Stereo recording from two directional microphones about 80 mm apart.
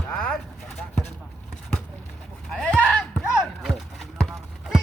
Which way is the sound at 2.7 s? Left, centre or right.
Centre.